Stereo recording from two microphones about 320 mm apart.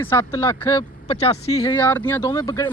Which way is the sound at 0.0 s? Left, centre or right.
Centre.